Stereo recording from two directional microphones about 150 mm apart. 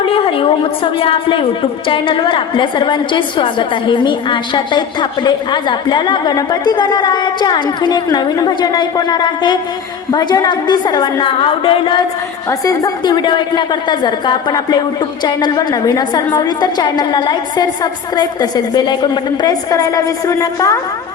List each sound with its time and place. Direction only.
0.0 s a woman's voice: 35° left (ahead or behind)
12.5 s a woman's voice: 25° left (ahead or behind)